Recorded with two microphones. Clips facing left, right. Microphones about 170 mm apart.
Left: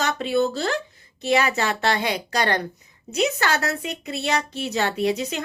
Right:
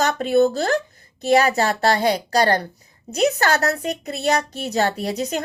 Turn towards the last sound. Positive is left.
turn(degrees=-40)  # may be behind; listen again after turning